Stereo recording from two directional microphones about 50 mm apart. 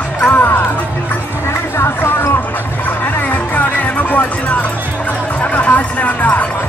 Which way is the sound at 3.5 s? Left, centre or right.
Left.